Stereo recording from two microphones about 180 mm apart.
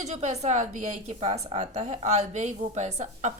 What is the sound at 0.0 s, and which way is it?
A woman's voice, 40° right (ahead or behind).